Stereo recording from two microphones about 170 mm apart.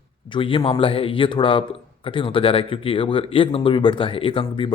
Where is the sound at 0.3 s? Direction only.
30° left (ahead or behind).